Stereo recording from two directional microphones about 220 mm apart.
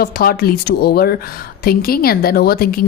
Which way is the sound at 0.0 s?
45° left (ahead or behind).